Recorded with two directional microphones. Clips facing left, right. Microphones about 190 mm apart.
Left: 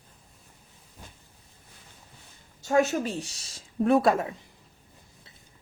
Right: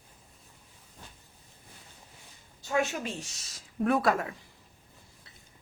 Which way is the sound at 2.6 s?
40° left (ahead or behind).